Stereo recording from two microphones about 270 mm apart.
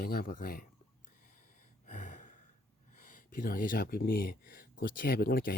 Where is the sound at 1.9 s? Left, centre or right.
Left.